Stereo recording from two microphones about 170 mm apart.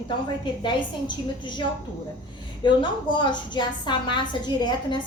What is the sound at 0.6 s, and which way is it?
Speech, 25° left (ahead or behind).